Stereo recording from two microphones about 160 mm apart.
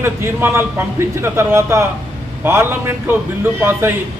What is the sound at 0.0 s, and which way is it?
A man's voice, 15° right (ahead or behind).